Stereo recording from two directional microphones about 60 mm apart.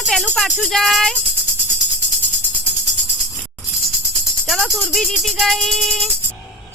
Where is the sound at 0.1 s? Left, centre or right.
Centre.